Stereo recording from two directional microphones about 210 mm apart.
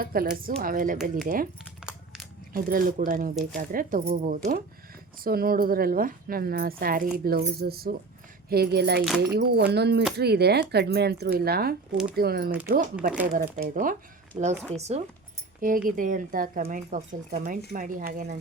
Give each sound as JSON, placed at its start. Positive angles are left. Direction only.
{"t": 0.0, "sound": "speech", "side_deg": -45}
{"t": 2.5, "sound": "speech", "side_deg": -40}
{"t": 14.3, "sound": "speech", "side_deg": -10}
{"t": 14.8, "sound": "speech", "side_deg": -30}
{"t": 15.6, "sound": "speech", "side_deg": -40}